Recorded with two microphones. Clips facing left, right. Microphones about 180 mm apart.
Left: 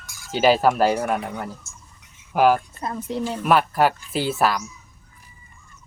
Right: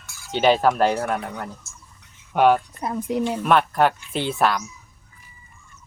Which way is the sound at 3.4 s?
5° left (ahead or behind).